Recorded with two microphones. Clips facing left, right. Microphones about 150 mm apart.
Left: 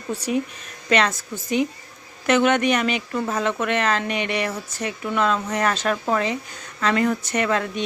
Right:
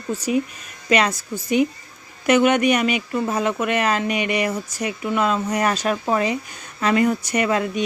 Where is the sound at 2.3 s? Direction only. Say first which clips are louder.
Right 2 dB; 10° right (ahead or behind).